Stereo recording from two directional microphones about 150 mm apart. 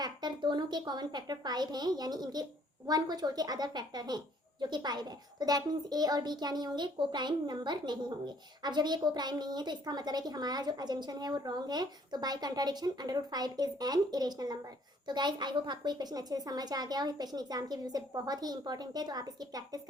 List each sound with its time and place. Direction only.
0.0 s a child's voice: 30° right (ahead or behind)